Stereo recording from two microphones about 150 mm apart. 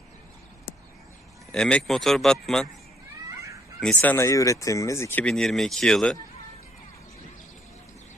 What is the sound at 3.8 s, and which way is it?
Speech, 10° left (ahead or behind).